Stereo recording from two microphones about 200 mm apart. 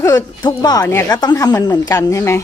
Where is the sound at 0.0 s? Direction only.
15° left (ahead or behind).